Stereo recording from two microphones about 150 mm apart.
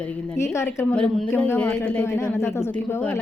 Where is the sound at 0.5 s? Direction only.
15° left (ahead or behind).